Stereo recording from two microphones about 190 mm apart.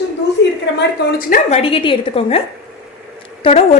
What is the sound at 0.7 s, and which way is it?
Speech, 50° left (ahead or behind).